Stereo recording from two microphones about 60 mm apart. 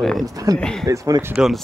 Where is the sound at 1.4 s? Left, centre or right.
Centre.